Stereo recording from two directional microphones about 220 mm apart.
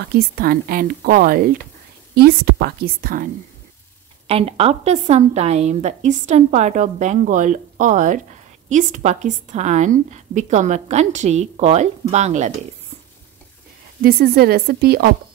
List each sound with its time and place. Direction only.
0.4 s a woman's voice: 40° right (ahead or behind)
4.3 s a woman's voice: 25° right (ahead or behind)
14.0 s a woman's voice: 45° right (ahead or behind)